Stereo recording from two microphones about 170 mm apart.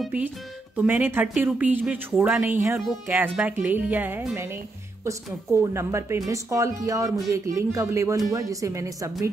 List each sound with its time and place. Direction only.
0.0 s speech: 10° right (ahead or behind)